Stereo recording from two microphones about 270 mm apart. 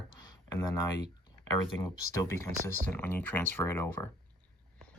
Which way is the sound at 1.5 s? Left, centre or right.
Centre.